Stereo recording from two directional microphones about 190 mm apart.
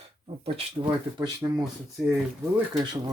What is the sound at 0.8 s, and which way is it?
Speech, 15° right (ahead or behind).